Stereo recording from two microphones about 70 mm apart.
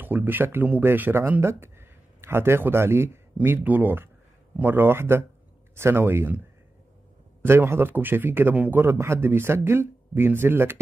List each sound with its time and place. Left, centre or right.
0.0 s a man's voice: right
7.4 s a man's voice: right